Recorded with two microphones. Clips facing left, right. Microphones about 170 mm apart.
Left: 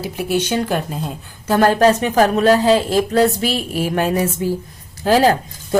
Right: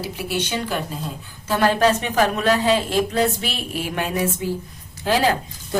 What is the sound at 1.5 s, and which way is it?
A woman's voice, 45° left (ahead or behind).